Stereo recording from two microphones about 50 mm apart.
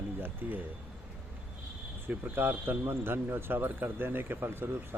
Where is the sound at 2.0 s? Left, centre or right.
Right.